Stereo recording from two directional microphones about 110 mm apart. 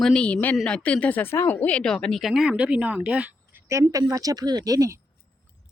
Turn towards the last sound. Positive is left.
turn(degrees=-35)  # may be behind; listen again after turning